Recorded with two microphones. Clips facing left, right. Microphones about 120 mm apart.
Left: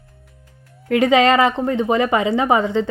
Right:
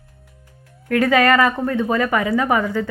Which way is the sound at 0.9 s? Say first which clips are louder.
Left 1 dB; 20° left (ahead or behind).